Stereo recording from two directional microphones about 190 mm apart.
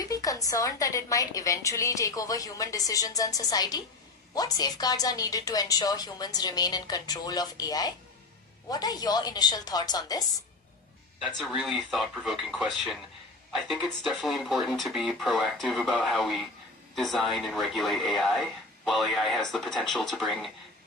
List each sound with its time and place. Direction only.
0.0 s a woman's voice: 20° left (ahead or behind)
11.3 s speech: centre (ahead or behind)